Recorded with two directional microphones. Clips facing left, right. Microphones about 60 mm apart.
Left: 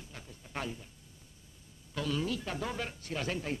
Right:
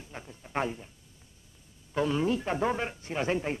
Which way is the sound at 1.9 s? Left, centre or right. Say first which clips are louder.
Right 7 dB; right.